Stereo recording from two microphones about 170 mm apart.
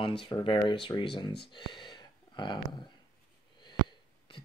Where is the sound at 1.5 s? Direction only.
30° left (ahead or behind).